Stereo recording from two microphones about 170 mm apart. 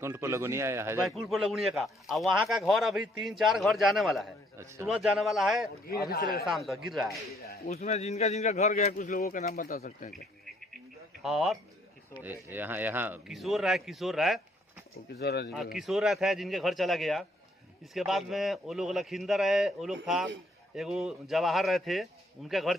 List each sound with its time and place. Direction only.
0.0 s speech: 15° right (ahead or behind)
1.0 s speech: centre (ahead or behind)
4.5 s speech: 15° right (ahead or behind)
4.9 s speech: centre (ahead or behind)
7.7 s a man's voice: 40° left (ahead or behind)
9.5 s speech: 60° left (ahead or behind)
11.2 s speech: 5° right (ahead or behind)
13.3 s speech: centre (ahead or behind)
15.1 s speech: 70° left (ahead or behind)
15.8 s speech: centre (ahead or behind)